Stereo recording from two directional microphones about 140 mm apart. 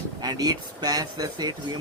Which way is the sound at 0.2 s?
30° right (ahead or behind).